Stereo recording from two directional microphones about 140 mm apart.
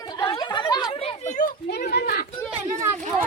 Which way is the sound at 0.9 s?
50° left (ahead or behind).